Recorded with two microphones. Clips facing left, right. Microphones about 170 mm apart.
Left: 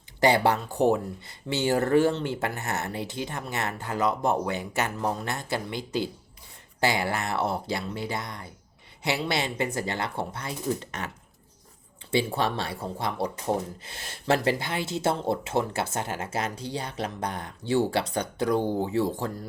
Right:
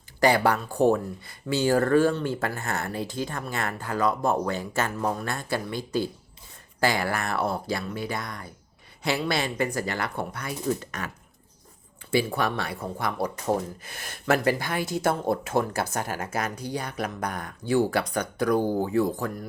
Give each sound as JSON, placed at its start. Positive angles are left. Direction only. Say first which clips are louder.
{"t": 0.2, "sound": "speech", "louder": "even", "side_deg": 20}
{"t": 12.3, "sound": "speech", "louder": "even", "side_deg": 25}